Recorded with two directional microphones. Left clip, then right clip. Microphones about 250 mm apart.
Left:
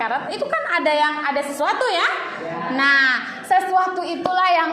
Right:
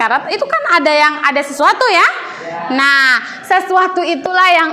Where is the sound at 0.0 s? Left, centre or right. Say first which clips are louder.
Right 9 dB; right.